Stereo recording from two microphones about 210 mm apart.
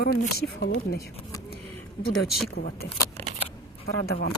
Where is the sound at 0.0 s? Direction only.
45° left (ahead or behind).